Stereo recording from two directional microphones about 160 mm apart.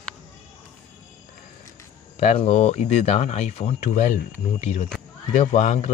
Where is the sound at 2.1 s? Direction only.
45° left (ahead or behind).